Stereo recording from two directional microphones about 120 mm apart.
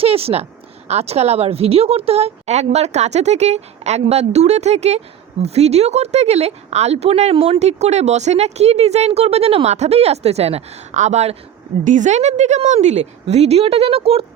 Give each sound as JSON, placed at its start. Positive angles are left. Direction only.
{"t": 0.0, "sound": "speech", "side_deg": -55}
{"t": 7.6, "sound": "speech", "side_deg": -65}
{"t": 11.9, "sound": "speech", "side_deg": -85}